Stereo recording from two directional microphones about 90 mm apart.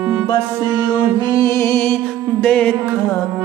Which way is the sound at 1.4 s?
30° left (ahead or behind).